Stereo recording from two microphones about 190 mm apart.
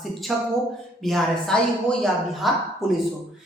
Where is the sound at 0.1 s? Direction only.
Centre (ahead or behind).